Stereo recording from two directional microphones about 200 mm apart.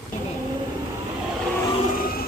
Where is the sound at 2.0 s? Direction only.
50° left (ahead or behind).